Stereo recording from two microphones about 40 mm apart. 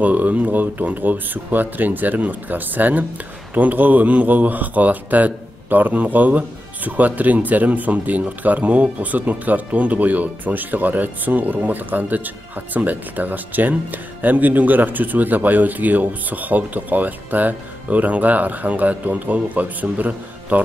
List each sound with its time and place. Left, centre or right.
0.0 s speech: right